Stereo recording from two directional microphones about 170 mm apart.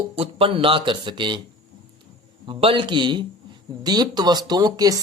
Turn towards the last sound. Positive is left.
turn(degrees=-20)  # may be behind; listen again after turning